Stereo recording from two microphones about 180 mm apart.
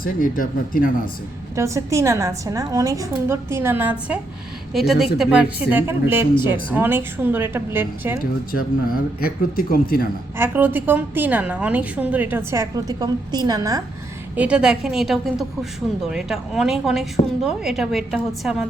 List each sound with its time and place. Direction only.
0.0 s speech: 50° left (ahead or behind)
1.5 s a woman's voice: 15° right (ahead or behind)
9.2 s speech: 55° left (ahead or behind)
10.3 s a woman's voice: 10° right (ahead or behind)
14.3 s a woman's voice: 5° right (ahead or behind)